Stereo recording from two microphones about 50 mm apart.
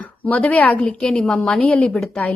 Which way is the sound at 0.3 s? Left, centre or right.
Left.